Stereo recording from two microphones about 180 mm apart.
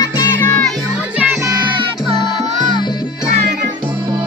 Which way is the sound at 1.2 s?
15° right (ahead or behind).